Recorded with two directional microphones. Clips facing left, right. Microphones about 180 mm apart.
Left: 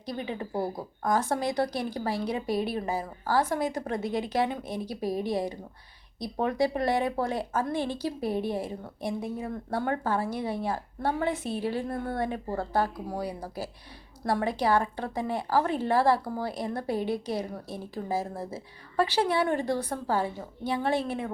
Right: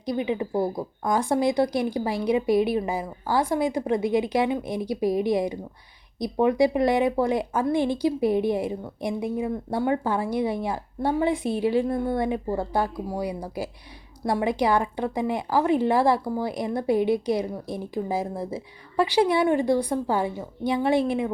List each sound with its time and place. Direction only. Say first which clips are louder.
0.0 s a woman's voice: right 8 dB; 15° right (ahead or behind)